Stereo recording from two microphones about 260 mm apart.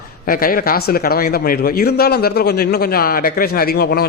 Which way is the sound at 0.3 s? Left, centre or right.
Left.